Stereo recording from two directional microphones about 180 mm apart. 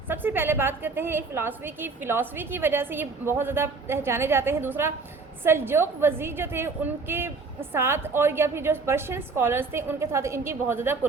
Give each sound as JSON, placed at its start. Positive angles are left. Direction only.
{"t": 0.1, "sound": "a woman's voice", "side_deg": -10}